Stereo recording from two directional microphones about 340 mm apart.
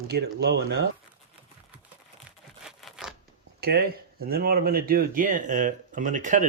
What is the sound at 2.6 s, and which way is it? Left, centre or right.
Zipper, centre.